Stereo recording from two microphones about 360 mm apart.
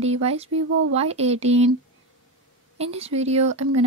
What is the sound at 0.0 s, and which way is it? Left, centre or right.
Speech, centre.